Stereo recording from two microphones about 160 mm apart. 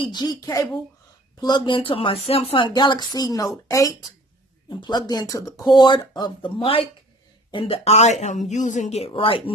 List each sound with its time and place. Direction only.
0.0 s speech: 25° left (ahead or behind)